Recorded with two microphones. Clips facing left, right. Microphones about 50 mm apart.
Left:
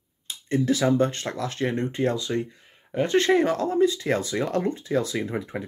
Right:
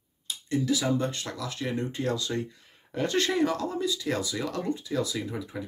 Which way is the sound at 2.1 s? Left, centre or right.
Left.